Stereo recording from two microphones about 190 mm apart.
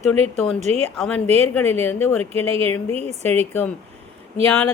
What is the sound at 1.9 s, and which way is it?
Speech, 10° left (ahead or behind).